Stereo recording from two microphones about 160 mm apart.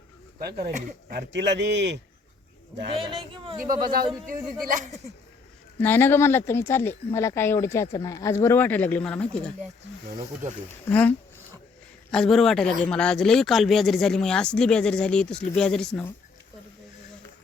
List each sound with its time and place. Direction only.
0.3 s speech: 75° right (ahead or behind)
1.1 s a man's voice: 90° right
2.9 s speech: 30° right (ahead or behind)
4.6 s speech: 50° right (ahead or behind)
5.8 s speech: 15° left (ahead or behind)
10.8 s speech: 10° left (ahead or behind)
12.1 s speech: 5° left (ahead or behind)